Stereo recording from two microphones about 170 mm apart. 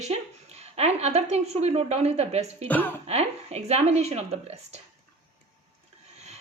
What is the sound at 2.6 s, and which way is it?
Speech, 10° left (ahead or behind).